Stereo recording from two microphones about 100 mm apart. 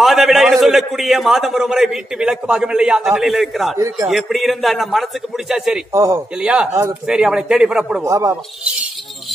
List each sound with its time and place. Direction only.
0.0 s a man's voice: centre (ahead or behind)
3.7 s a man's voice: 30° right (ahead or behind)
4.1 s a man's voice: centre (ahead or behind)
5.9 s a man's voice: 30° right (ahead or behind)
6.4 s a man's voice: 10° right (ahead or behind)
6.7 s speech: 25° right (ahead or behind)
7.1 s a man's voice: 5° right (ahead or behind)
8.0 s a man's voice: 30° right (ahead or behind)